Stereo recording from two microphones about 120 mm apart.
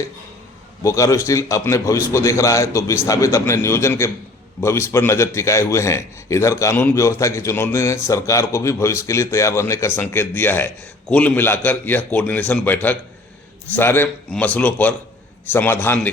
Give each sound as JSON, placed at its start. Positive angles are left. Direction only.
{"t": 0.8, "sound": "a man's voice", "side_deg": 25}